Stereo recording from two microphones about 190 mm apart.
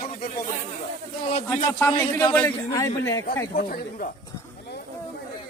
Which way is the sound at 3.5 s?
50° left (ahead or behind).